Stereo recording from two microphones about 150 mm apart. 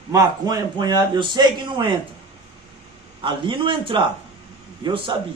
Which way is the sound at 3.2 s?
35° right (ahead or behind).